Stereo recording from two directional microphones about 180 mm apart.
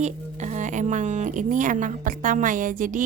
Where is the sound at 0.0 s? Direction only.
40° right (ahead or behind).